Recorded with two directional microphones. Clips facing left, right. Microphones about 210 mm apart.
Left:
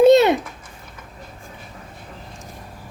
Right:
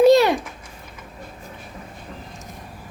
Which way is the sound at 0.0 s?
20° left (ahead or behind).